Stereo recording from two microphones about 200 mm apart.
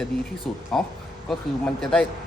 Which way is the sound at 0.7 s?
Centre (ahead or behind).